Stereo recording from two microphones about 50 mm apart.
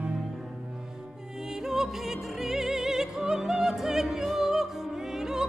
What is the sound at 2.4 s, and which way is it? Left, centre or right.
Opera, centre.